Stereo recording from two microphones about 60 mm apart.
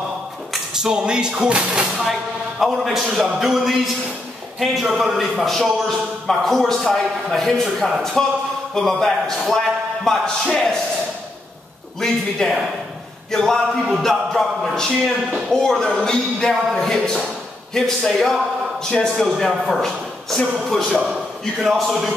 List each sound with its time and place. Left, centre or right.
0.7 s speech: centre
2.7 s a man's voice: centre
12.0 s a man's voice: centre
21.6 s a man's voice: centre